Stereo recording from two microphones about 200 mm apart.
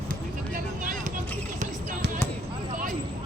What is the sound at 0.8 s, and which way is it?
Vehicle, 40° right (ahead or behind).